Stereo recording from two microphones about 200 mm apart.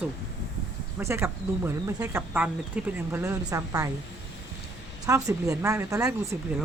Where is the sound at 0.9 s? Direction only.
10° right (ahead or behind).